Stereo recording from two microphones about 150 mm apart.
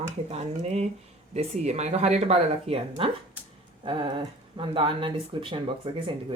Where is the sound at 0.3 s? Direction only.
45° right (ahead or behind).